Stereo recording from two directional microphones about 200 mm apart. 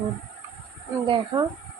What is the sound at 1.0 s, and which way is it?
Speech, 25° right (ahead or behind).